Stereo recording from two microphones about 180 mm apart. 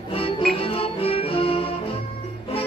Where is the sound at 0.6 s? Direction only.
30° left (ahead or behind).